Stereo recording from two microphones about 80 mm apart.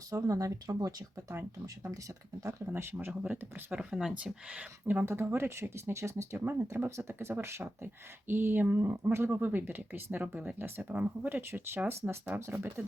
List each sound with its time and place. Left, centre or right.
0.1 s speech: right
2.4 s speech: right
2.7 s speech: right
5.0 s speech: right